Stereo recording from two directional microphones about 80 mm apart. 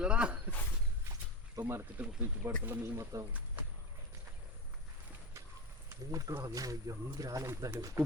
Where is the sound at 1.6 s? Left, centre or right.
Right.